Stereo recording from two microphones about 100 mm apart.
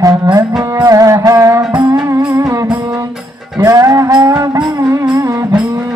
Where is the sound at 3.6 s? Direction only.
35° right (ahead or behind).